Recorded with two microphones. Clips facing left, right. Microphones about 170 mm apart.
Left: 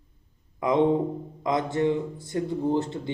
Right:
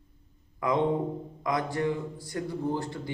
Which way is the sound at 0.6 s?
20° left (ahead or behind).